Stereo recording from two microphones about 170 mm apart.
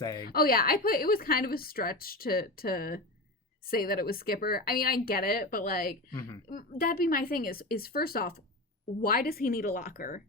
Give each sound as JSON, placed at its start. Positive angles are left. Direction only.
{"t": 0.2, "sound": "a woman's voice", "side_deg": 60}